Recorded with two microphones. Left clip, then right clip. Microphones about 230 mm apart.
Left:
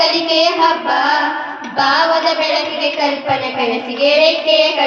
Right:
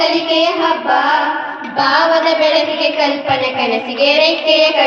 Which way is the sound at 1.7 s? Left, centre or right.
Centre.